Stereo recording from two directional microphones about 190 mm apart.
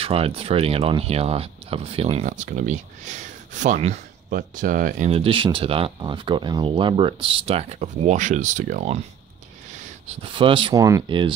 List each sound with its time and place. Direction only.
0.0 s speech: 30° right (ahead or behind)
10.0 s speech: 25° right (ahead or behind)